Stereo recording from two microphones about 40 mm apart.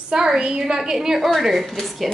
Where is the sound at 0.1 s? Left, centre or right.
Centre.